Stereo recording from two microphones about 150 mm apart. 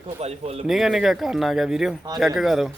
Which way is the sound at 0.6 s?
Centre (ahead or behind).